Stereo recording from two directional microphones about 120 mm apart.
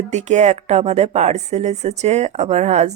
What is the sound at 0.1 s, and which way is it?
Speech, 75° right (ahead or behind).